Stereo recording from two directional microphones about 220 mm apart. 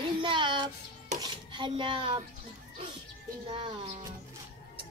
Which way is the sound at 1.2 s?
20° right (ahead or behind).